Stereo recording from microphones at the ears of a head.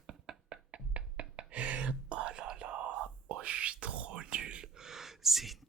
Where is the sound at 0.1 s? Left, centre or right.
Right.